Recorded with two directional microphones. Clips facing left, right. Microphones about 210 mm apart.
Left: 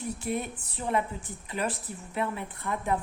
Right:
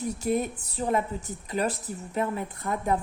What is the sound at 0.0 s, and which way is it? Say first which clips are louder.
A woman's voice: right 5 dB; 40° right (ahead or behind).